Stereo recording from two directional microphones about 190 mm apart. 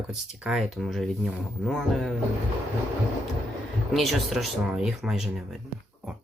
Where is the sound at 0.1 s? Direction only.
Centre (ahead or behind).